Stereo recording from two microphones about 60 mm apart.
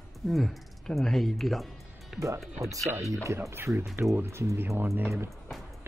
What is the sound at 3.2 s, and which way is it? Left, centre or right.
Speech, right.